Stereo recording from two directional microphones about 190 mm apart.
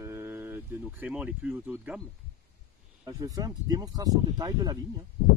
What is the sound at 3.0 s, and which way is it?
Speech, 20° right (ahead or behind).